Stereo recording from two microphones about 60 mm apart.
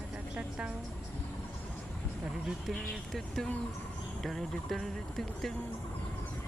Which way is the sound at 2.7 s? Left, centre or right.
Centre.